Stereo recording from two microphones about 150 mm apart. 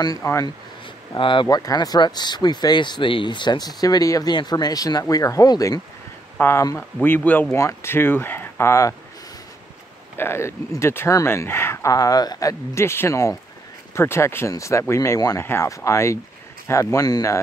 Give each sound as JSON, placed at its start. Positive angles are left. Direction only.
{"t": 0.0, "sound": "speech", "side_deg": 20}
{"t": 1.1, "sound": "speech", "side_deg": 35}
{"t": 10.1, "sound": "speech", "side_deg": 15}